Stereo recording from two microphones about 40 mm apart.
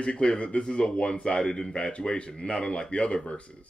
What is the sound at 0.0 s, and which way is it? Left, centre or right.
A man's voice, left.